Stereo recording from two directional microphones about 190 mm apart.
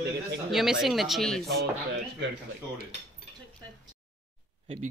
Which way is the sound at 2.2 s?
65° right (ahead or behind).